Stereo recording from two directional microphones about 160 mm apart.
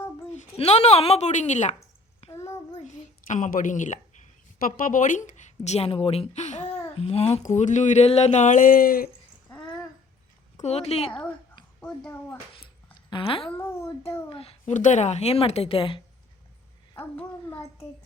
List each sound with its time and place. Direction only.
0.5 s speech: 40° left (ahead or behind)
2.5 s child singing: 45° left (ahead or behind)
4.8 s a woman's voice: 55° left (ahead or behind)
10.6 s speech: 40° left (ahead or behind)
11.8 s a child's voice: 5° left (ahead or behind)
12.6 s a sound: 30° left (ahead or behind)
13.6 s a child's voice: 15° left (ahead or behind)
14.3 s a sound: 35° left (ahead or behind)
14.7 s speech: 50° left (ahead or behind)
17.2 s a child's voice: 15° left (ahead or behind)